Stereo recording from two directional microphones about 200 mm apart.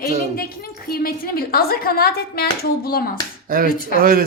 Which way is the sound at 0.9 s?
45° left (ahead or behind).